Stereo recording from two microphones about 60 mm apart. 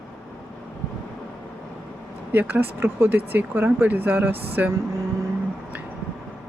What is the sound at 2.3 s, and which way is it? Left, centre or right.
Speech, right.